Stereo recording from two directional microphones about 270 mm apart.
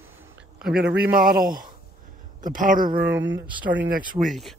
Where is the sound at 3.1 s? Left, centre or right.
Right.